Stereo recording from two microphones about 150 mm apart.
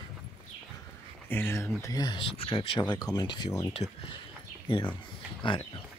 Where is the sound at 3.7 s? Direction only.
40° left (ahead or behind).